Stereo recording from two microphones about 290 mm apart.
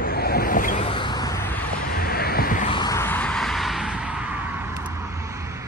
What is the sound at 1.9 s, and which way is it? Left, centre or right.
Vehicle, left.